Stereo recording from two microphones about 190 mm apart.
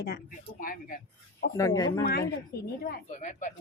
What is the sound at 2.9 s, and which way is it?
Speech, 40° left (ahead or behind).